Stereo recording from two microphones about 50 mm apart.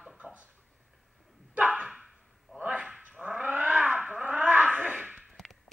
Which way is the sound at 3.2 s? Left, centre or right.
Right.